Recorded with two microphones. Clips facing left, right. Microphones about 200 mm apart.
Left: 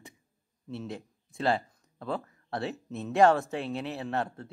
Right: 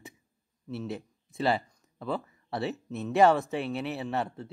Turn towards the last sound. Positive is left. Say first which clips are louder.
# even
turn(degrees=0)  # may be behind; listen again after turning